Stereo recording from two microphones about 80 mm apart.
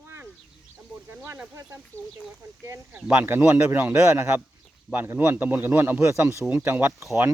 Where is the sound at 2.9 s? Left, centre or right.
Centre.